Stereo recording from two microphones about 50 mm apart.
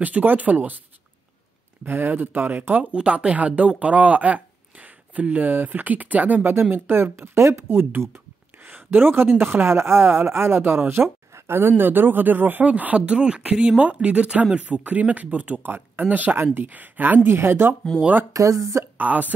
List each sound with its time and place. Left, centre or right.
0.0 s speech: right
1.9 s speech: right
6.4 s speech: right
8.6 s speech: right
12.6 s speech: right
13.0 s speech: centre; by 17.3 s right
17.5 s speech: right
18.5 s speech: right
18.9 s speech: right